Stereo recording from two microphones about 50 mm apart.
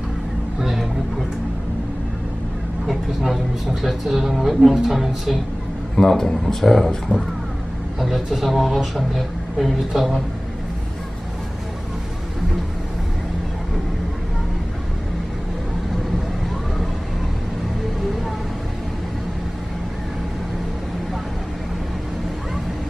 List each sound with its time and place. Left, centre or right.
0.6 s music: centre
2.9 s vehicle: centre
3.8 s speech: centre
5.9 s speech: centre